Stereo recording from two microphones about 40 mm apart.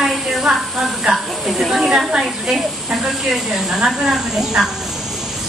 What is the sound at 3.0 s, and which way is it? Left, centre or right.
Speech, centre.